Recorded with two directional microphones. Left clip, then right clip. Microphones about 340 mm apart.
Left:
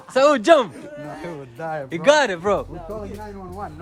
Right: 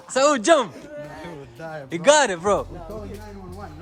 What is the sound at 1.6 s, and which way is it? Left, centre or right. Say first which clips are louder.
Speech: left 7 dB; centre.